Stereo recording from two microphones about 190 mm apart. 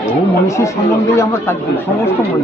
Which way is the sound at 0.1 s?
15° left (ahead or behind).